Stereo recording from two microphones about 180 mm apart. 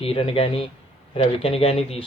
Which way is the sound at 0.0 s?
30° left (ahead or behind).